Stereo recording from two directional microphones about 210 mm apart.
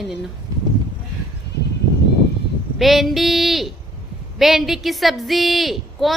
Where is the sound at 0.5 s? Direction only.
20° right (ahead or behind).